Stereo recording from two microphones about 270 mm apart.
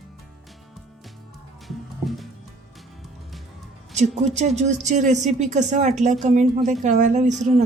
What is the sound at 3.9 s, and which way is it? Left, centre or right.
Speech, right.